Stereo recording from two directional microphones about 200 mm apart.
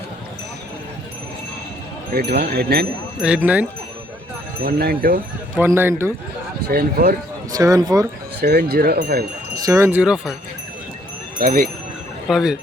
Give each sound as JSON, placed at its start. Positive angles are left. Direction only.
{"t": 2.1, "sound": "speech", "side_deg": -55}
{"t": 3.2, "sound": "speech", "side_deg": -5}
{"t": 4.6, "sound": "speech", "side_deg": -50}
{"t": 5.5, "sound": "speech", "side_deg": -10}
{"t": 6.7, "sound": "speech", "side_deg": -50}
{"t": 7.5, "sound": "speech", "side_deg": -15}
{"t": 8.4, "sound": "speech", "side_deg": -55}
{"t": 9.6, "sound": "speech", "side_deg": -15}
{"t": 11.3, "sound": "speech", "side_deg": -45}
{"t": 12.3, "sound": "speech", "side_deg": -5}